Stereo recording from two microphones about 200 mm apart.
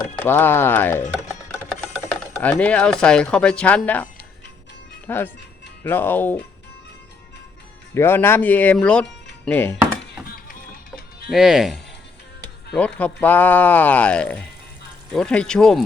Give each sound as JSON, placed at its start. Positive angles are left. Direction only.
{"t": 0.0, "sound": "speech", "side_deg": 10}
{"t": 1.7, "sound": "speech", "side_deg": 0}
{"t": 7.9, "sound": "speech", "side_deg": 10}
{"t": 9.7, "sound": "a sound", "side_deg": -5}
{"t": 11.3, "sound": "speech", "side_deg": 0}